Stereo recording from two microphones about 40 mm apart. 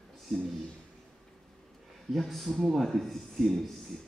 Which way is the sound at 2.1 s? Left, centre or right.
Centre.